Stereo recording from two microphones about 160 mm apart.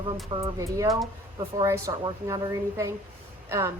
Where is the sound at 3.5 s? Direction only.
20° right (ahead or behind).